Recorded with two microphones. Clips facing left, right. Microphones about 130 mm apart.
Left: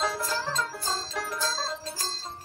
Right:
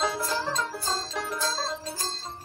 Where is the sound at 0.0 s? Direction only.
5° right (ahead or behind).